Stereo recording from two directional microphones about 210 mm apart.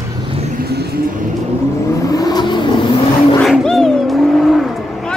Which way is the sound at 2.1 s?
20° left (ahead or behind).